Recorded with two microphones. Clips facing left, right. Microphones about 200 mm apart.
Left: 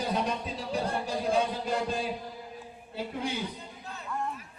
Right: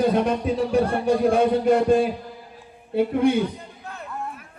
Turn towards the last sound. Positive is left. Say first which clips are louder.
# right 5 dB
turn(degrees=-55)  # may be behind; listen again after turning